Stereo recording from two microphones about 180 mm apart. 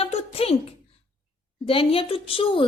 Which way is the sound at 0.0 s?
35° left (ahead or behind).